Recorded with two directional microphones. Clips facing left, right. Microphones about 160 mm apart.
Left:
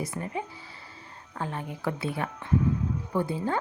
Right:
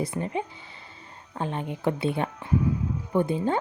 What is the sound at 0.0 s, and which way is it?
A woman's voice, 25° right (ahead or behind).